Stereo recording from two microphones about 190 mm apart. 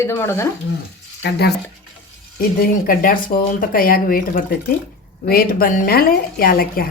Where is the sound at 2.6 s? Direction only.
50° left (ahead or behind).